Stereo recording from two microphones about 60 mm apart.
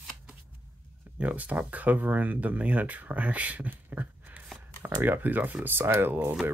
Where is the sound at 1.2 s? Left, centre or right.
Right.